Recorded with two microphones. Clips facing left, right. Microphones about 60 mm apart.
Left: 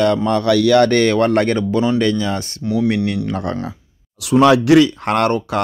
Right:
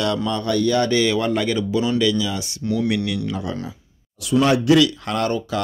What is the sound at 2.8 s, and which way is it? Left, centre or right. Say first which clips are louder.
Speech: left 4 dB; left.